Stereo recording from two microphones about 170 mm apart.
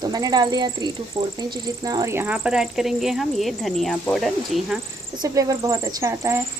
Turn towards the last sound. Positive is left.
turn(degrees=-15)  # may be behind; listen again after turning